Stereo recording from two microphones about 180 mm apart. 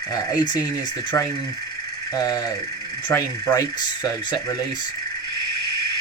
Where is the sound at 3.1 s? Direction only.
20° left (ahead or behind).